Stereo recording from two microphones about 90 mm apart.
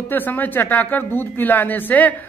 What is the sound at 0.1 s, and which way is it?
A man's voice, 20° left (ahead or behind).